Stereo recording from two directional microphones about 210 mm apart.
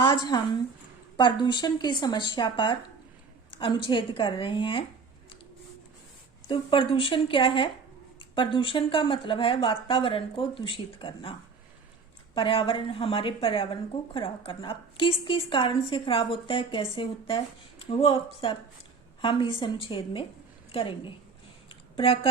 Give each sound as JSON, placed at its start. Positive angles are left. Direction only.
{"t": 0.0, "sound": "a woman's voice", "side_deg": 20}
{"t": 6.5, "sound": "speech", "side_deg": 25}
{"t": 21.7, "sound": "a sound", "side_deg": 25}